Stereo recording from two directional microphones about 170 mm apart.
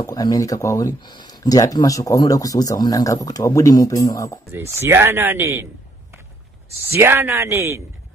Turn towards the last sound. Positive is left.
turn(degrees=-15)  # may be behind; listen again after turning